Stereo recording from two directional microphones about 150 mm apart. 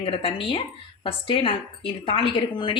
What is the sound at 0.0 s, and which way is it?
Speech, 40° left (ahead or behind).